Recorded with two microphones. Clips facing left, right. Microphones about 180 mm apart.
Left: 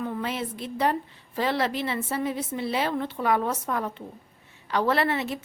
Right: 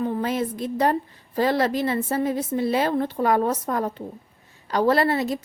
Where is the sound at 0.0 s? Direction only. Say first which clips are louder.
Right 6 dB; 40° right (ahead or behind).